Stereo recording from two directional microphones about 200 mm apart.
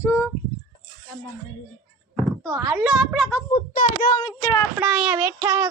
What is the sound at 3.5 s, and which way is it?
Speech, 30° left (ahead or behind).